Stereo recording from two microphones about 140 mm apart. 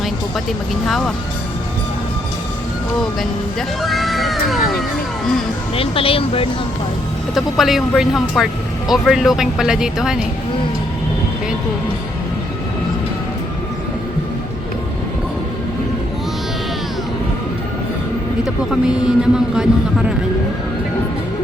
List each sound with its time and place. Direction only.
0.9 s a man's voice: centre (ahead or behind)
3.8 s cat: centre (ahead or behind)
5.7 s speech: 40° left (ahead or behind)
7.3 s a man's voice: centre (ahead or behind)
18.4 s a man's voice: 5° right (ahead or behind)